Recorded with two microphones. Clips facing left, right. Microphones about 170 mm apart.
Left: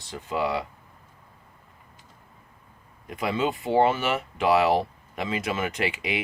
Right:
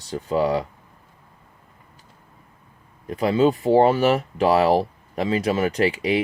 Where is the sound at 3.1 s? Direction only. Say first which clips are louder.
Right 8 dB; 35° right (ahead or behind).